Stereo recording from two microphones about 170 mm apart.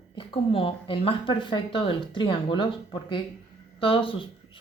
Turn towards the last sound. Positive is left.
turn(degrees=30)  # may be behind; listen again after turning